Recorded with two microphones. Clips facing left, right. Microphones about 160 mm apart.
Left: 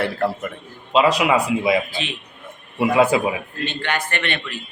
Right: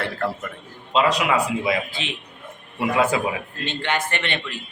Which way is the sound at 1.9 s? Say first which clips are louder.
Left 3 dB; 20° right (ahead or behind).